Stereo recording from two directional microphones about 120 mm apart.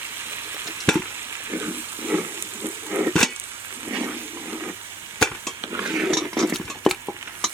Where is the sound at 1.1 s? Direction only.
20° right (ahead or behind).